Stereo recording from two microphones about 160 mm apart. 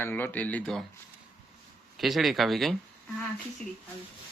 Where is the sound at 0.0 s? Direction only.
10° left (ahead or behind).